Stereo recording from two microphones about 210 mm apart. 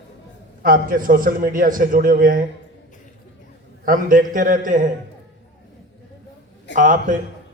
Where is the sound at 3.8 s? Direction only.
40° right (ahead or behind).